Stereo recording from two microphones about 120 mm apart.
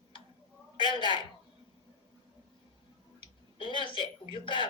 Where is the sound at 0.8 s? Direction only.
40° left (ahead or behind).